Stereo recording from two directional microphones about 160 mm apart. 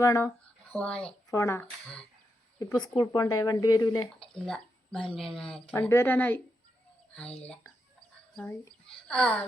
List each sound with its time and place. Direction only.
0.0 s speech: 20° left (ahead or behind)
0.7 s speech: 5° left (ahead or behind)
1.3 s speech: 20° left (ahead or behind)
2.8 s speech: 25° left (ahead or behind)
4.2 s speech: 5° left (ahead or behind)
9.0 s speech: 5° left (ahead or behind)